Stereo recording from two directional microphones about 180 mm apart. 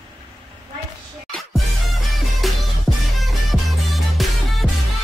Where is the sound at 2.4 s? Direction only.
Centre (ahead or behind).